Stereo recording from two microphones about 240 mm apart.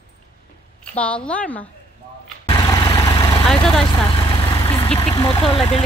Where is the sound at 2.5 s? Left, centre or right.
Centre.